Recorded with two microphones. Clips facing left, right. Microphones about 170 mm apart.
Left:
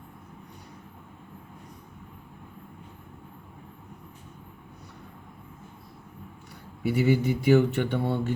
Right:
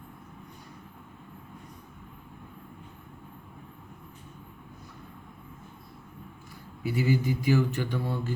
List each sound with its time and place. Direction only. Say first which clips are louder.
6.8 s speech: left 3 dB; 70° left (ahead or behind)